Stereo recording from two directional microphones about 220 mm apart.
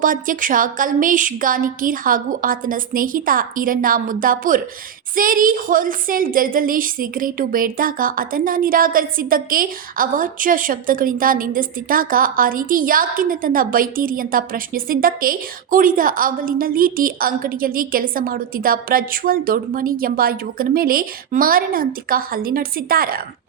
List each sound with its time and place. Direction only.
0.0 s a woman's voice: 40° right (ahead or behind)